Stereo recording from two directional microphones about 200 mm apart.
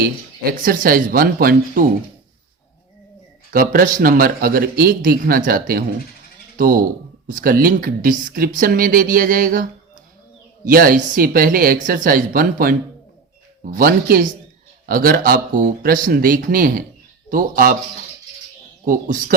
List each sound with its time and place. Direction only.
0.5 s speech: 45° right (ahead or behind)
3.5 s speech: 45° right (ahead or behind)
18.9 s speech: 40° right (ahead or behind)